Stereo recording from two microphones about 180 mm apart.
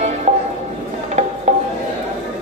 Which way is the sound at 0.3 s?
40° right (ahead or behind).